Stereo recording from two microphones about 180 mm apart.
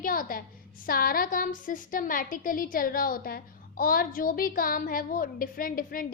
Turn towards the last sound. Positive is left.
turn(degrees=50)  # may be behind; listen again after turning